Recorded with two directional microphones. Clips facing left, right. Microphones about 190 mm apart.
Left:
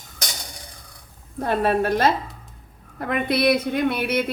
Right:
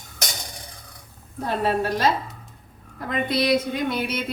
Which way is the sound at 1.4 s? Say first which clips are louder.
Left 3 dB; 55° left (ahead or behind).